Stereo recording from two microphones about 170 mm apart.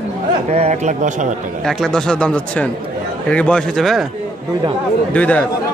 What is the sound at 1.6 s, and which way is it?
Speech, 5° left (ahead or behind).